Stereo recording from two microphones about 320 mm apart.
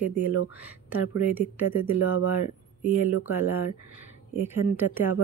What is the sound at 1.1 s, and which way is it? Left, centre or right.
Speech, right.